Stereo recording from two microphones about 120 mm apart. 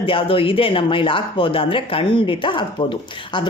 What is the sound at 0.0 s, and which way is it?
Speech, 45° left (ahead or behind).